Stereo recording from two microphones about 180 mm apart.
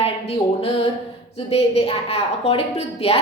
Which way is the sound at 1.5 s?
35° left (ahead or behind).